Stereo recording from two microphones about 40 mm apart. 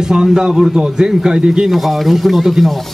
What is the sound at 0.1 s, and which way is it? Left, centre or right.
A man's voice, right.